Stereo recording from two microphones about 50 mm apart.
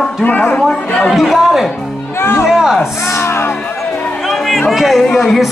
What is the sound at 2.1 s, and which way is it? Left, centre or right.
Music, left.